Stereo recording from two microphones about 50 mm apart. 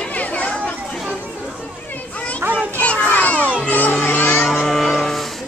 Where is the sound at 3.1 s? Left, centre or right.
Left.